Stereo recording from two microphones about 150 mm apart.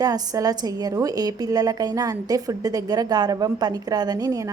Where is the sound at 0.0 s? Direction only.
25° right (ahead or behind).